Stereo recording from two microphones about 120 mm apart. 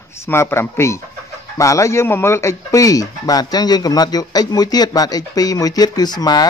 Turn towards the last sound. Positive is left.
turn(degrees=35)  # may be behind; listen again after turning